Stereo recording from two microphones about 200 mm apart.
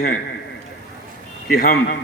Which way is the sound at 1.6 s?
45° left (ahead or behind).